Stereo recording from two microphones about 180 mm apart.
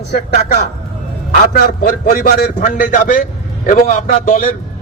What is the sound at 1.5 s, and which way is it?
A man's voice, 55° left (ahead or behind).